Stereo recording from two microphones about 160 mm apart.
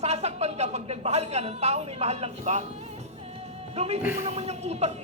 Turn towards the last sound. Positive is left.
turn(degrees=-45)  # may be behind; listen again after turning